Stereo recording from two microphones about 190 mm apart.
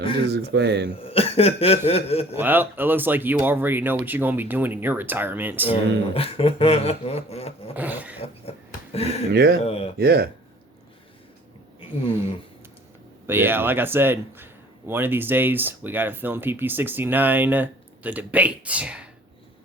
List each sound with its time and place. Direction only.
0.3 s speech: 60° right (ahead or behind)
1.0 s a sound: 30° left (ahead or behind)
2.4 s a man's voice: 10° right (ahead or behind)
6.1 s a sound: 30° left (ahead or behind)
7.8 s dog: 10° right (ahead or behind)
8.2 s speech: 30° left (ahead or behind)
9.3 s speech: 60° right (ahead or behind)
9.6 s a sound: 30° left (ahead or behind)
10.0 s speech: 55° right (ahead or behind)
13.2 s a man's voice: 10° right (ahead or behind)